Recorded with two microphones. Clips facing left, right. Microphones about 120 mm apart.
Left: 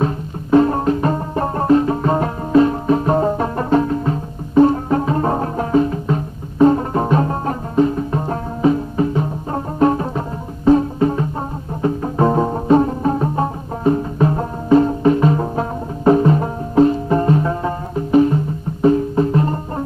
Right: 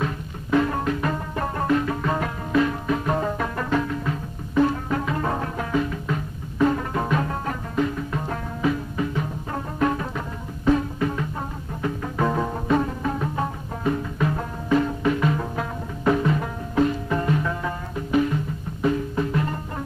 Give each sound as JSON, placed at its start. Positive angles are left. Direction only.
{"t": 0.0, "sound": "music", "side_deg": 35}